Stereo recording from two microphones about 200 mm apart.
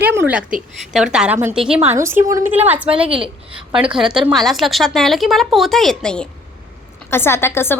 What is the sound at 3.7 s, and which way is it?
A woman's voice, 5° right (ahead or behind).